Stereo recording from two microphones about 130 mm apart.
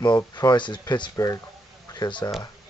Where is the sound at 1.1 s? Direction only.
25° left (ahead or behind).